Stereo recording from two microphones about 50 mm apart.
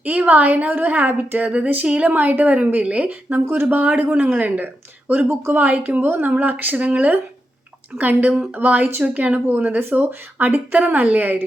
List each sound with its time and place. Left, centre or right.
0.0 s a woman's voice: right
1.5 s a sound: right
2.1 s a woman's voice: right
6.7 s a sound: right
7.9 s a woman's voice: right
10.3 s a woman's voice: right